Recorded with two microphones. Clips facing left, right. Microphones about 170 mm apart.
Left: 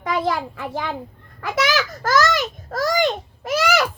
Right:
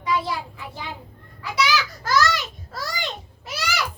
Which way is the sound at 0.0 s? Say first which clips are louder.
Left 3 dB; 50° left (ahead or behind).